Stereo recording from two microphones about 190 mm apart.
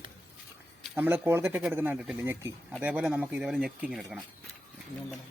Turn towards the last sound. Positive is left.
turn(degrees=0)  # may be behind; listen again after turning